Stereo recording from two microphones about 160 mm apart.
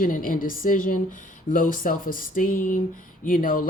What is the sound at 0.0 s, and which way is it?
A woman's voice, 60° left (ahead or behind).